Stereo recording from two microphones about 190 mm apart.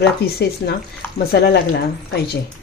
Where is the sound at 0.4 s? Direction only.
55° left (ahead or behind).